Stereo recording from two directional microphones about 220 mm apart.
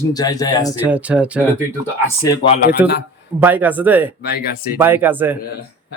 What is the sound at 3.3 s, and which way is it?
Speech, 10° right (ahead or behind).